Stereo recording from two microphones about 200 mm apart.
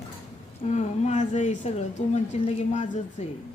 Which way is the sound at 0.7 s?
35° left (ahead or behind).